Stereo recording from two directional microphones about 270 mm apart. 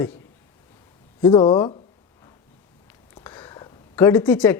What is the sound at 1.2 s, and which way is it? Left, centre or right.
Speech, centre.